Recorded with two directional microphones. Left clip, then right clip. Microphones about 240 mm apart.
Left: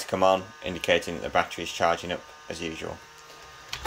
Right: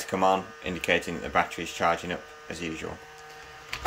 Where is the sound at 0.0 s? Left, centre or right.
Centre.